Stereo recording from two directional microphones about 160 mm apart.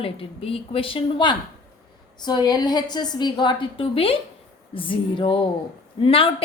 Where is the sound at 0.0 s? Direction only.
35° left (ahead or behind).